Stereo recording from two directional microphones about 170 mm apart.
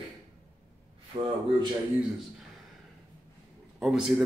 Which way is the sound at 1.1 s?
30° right (ahead or behind).